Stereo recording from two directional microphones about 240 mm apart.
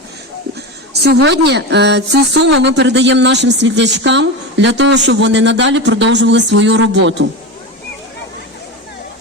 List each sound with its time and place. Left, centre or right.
0.9 s speech: right